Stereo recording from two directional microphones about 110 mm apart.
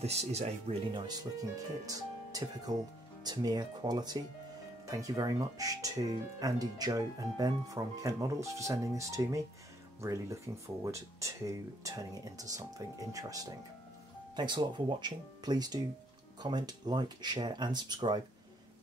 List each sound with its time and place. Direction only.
0.0 s speech: 80° right
0.9 s speech: 35° right (ahead or behind)